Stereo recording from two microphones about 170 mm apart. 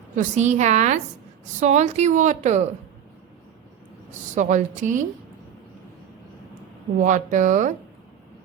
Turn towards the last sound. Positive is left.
turn(degrees=-50)  # may be behind; listen again after turning